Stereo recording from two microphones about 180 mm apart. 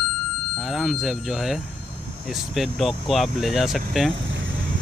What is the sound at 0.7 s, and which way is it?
Speech, centre (ahead or behind).